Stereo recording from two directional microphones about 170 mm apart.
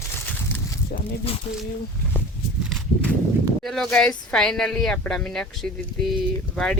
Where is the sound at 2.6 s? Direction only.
5° left (ahead or behind).